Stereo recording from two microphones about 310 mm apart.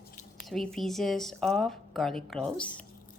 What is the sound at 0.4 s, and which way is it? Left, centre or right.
A woman's voice, centre.